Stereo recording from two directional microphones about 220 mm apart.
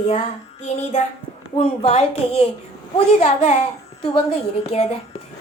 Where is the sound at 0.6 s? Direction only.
30° left (ahead or behind).